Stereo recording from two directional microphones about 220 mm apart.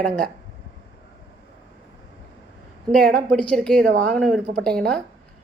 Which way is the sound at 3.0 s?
40° right (ahead or behind).